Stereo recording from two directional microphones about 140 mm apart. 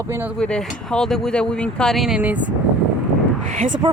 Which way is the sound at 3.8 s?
40° right (ahead or behind).